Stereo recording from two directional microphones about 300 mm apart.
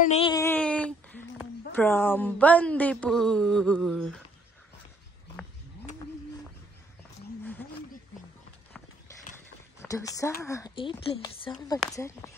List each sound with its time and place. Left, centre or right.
0.0 s speech: centre
9.8 s speech: centre